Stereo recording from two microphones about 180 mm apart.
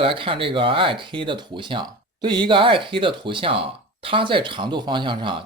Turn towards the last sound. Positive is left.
turn(degrees=-25)  # may be behind; listen again after turning